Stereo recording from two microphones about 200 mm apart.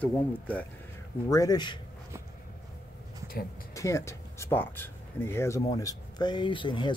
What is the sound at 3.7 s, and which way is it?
Speech, 15° left (ahead or behind).